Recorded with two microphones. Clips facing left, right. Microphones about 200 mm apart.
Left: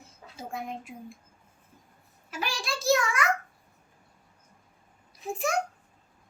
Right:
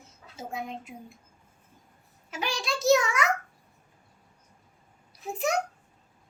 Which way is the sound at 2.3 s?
20° right (ahead or behind).